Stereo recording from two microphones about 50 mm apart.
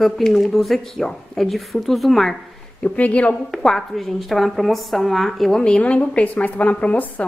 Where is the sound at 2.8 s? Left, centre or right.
Left.